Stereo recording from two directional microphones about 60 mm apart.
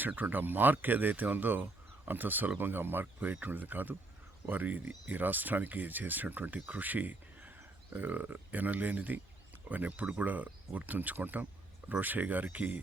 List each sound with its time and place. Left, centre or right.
0.2 s speech: right